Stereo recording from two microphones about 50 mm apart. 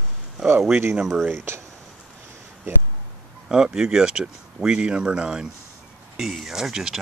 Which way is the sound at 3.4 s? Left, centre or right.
Centre.